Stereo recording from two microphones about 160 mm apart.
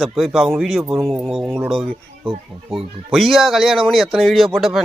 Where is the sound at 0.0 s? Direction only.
Centre (ahead or behind).